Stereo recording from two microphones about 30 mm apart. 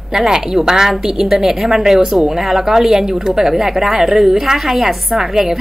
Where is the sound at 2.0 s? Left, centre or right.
Right.